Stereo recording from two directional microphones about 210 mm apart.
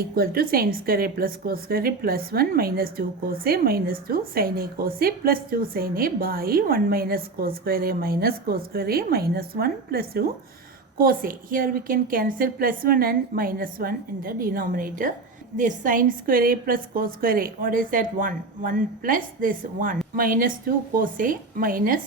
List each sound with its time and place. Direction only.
0.2 s a woman's voice: 45° right (ahead or behind)